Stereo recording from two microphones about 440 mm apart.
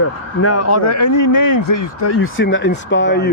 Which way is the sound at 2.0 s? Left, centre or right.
Left.